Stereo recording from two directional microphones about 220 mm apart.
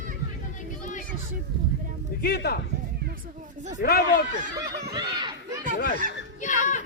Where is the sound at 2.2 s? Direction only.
45° left (ahead or behind).